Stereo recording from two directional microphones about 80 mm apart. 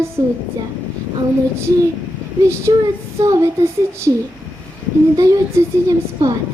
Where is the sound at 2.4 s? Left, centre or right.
Right.